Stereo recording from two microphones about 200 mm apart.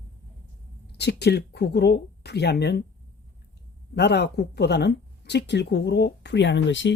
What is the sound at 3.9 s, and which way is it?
Speech, 55° left (ahead or behind).